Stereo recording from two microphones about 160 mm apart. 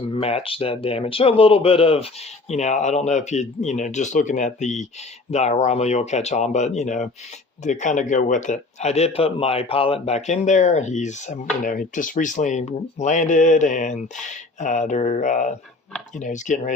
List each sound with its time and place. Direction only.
0.1 s speech: 40° left (ahead or behind)